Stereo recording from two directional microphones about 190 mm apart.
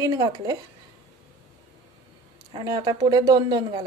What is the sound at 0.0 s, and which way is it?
Speech, 20° right (ahead or behind).